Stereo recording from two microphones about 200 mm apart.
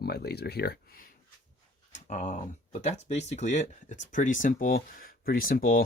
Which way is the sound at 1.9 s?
35° left (ahead or behind).